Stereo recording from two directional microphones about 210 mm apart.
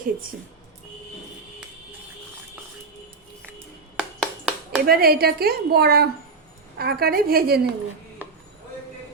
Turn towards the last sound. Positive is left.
turn(degrees=-50)  # may be behind; listen again after turning